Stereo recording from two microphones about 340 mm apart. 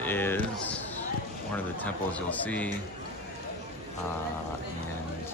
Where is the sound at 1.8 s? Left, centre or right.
Centre.